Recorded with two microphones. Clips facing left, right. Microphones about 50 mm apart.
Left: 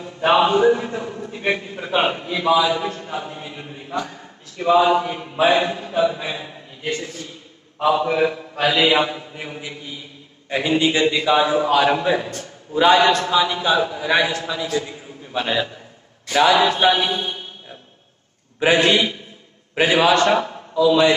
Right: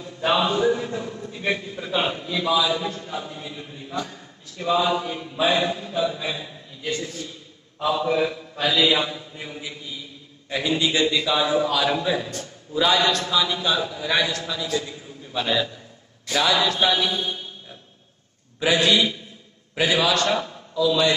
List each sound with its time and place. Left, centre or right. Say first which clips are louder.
0.0 s a man's voice: left 5 dB; left